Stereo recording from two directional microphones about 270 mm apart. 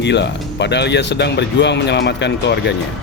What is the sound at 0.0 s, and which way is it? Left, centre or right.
Speech, left.